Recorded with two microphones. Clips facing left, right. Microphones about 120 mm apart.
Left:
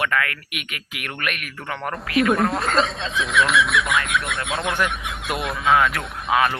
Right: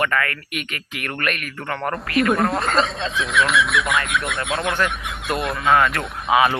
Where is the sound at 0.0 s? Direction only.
5° left (ahead or behind).